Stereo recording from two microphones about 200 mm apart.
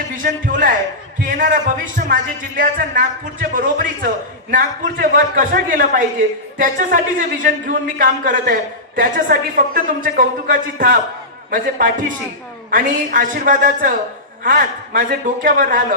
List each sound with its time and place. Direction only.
0.2 s a man's voice: 40° right (ahead or behind)
12.7 s a man's voice: 40° right (ahead or behind)